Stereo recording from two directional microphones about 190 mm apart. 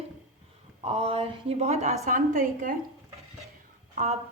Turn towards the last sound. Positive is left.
turn(degrees=-40)  # may be behind; listen again after turning